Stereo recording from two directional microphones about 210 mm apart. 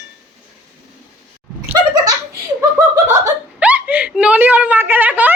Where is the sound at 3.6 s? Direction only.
5° right (ahead or behind).